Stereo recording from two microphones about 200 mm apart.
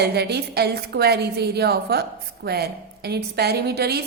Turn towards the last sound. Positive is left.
turn(degrees=-55)  # may be behind; listen again after turning